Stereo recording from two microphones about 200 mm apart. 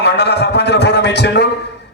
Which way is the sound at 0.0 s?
55° left (ahead or behind).